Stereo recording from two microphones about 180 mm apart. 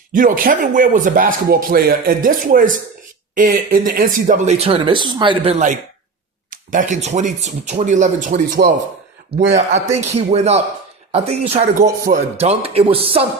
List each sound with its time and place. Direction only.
0.1 s speech: 50° right (ahead or behind); by 13.2 s 30° right (ahead or behind)